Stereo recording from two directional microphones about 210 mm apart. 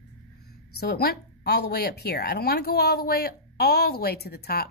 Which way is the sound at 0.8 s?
50° left (ahead or behind).